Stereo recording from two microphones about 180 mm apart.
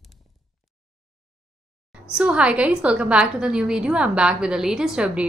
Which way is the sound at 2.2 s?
5° right (ahead or behind).